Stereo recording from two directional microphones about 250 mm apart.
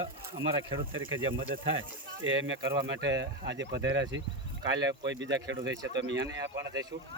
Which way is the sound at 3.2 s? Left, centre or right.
Right.